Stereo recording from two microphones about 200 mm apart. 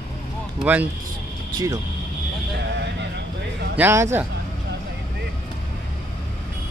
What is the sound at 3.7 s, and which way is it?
Speech, 10° right (ahead or behind).